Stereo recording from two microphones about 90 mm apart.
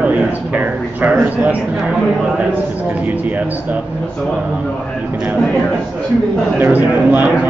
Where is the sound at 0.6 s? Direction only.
20° right (ahead or behind).